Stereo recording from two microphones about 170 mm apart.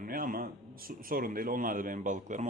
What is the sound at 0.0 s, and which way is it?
A man's voice, 55° right (ahead or behind).